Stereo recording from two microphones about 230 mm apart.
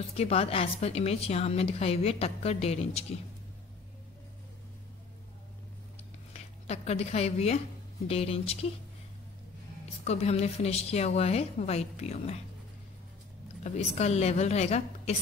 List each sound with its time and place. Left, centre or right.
0.1 s a woman's voice: left
6.3 s a woman's voice: left
10.0 s a woman's voice: left
13.7 s a woman's voice: left